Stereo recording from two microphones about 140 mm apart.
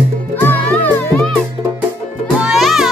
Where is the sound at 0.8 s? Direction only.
10° left (ahead or behind).